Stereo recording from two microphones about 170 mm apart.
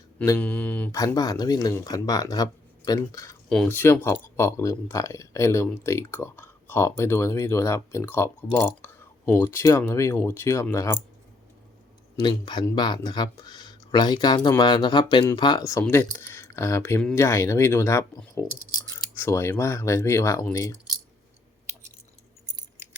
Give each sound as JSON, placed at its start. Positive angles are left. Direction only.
{"t": 0.3, "sound": "speech", "side_deg": 10}
{"t": 0.9, "sound": "speech", "side_deg": 20}
{"t": 3.5, "sound": "speech", "side_deg": 10}
{"t": 12.1, "sound": "speech", "side_deg": 25}
{"t": 19.1, "sound": "speech", "side_deg": 15}